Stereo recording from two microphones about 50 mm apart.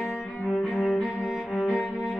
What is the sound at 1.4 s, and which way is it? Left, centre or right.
Cello, left.